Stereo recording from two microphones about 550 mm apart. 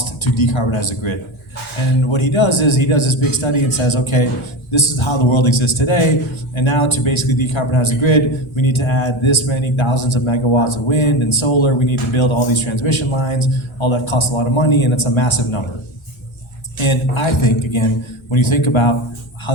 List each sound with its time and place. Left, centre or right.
0.0 s a man's voice: left
16.8 s a man's voice: left
19.5 s music: left